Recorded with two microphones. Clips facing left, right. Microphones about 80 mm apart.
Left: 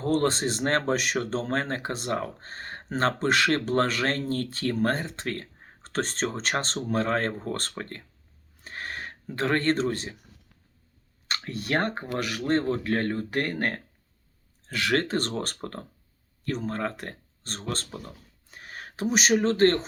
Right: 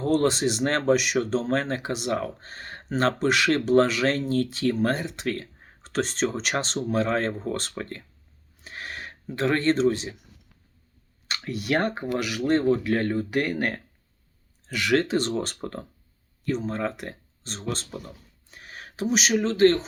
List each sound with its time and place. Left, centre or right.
0.0 s speech: left
8.6 s a sound: left
9.2 s speech: left
11.3 s speech: left
18.5 s a sound: left
19.4 s speech: left